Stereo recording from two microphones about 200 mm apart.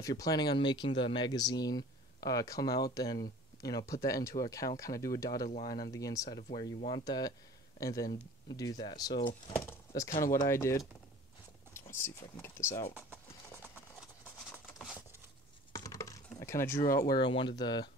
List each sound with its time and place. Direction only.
0.0 s speech: 20° left (ahead or behind)
9.5 s a sound: 10° left (ahead or behind)
10.0 s speech: 45° left (ahead or behind)
10.3 s speech: 15° left (ahead or behind)
12.0 s speech: 10° left (ahead or behind)
15.7 s typing: 20° left (ahead or behind)
17.1 s speech: 25° left (ahead or behind)